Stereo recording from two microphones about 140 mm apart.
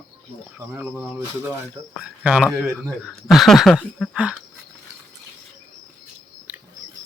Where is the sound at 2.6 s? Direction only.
20° right (ahead or behind).